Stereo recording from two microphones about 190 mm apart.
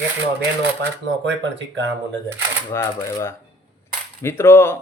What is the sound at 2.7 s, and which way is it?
A man's voice, 15° left (ahead or behind).